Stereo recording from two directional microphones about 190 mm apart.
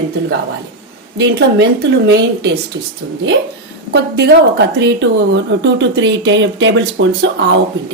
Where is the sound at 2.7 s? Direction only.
65° right (ahead or behind).